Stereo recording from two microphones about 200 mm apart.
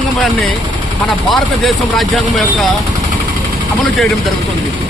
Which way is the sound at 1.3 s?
Centre (ahead or behind).